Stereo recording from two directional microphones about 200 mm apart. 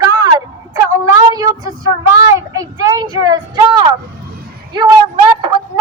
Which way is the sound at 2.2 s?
15° right (ahead or behind).